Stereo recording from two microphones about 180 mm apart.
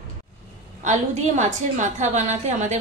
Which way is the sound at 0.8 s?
40° right (ahead or behind).